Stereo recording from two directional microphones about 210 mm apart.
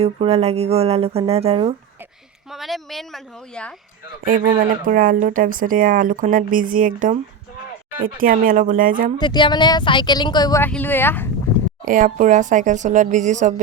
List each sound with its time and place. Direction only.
0.0 s speech: 30° right (ahead or behind)
2.5 s speech: centre (ahead or behind)
4.8 s speech: 40° right (ahead or behind)
9.1 s speech: 20° left (ahead or behind)
11.9 s speech: 40° right (ahead or behind)